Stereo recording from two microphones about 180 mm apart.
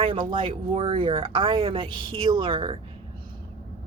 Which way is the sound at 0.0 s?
30° right (ahead or behind).